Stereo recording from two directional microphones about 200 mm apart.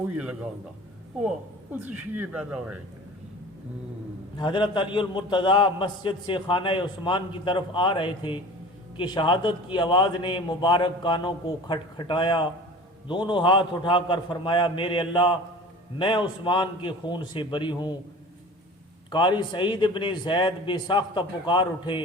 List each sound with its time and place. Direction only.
1.7 s speech: 10° right (ahead or behind)
4.4 s a man's voice: 25° left (ahead or behind)
19.1 s a man's voice: 25° left (ahead or behind)